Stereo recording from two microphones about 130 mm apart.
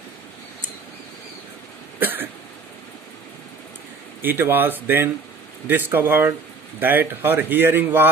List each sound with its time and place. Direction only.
2.0 s cough: 15° right (ahead or behind)
4.2 s speech: 15° right (ahead or behind)